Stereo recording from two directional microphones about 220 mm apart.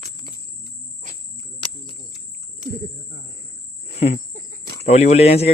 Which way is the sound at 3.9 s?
30° left (ahead or behind).